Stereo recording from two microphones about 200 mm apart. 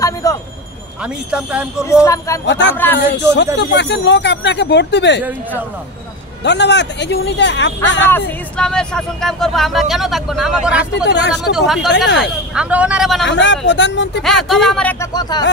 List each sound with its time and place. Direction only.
0.0 s a sound: 15° left (ahead or behind)
1.0 s speech: 5° right (ahead or behind)
2.0 s speech: 15° left (ahead or behind)
2.4 s speech: 60° left (ahead or behind)
2.7 s speech: 10° left (ahead or behind)
3.5 s speech: 60° left (ahead or behind)
6.4 s speech: 60° left (ahead or behind)
8.3 s speech: 5° left (ahead or behind)
11.1 s speech: 60° left (ahead or behind)
11.5 s speech: centre (ahead or behind)
13.3 s speech: 65° left (ahead or behind)
14.2 s speech: centre (ahead or behind)
15.1 s speech: 20° left (ahead or behind)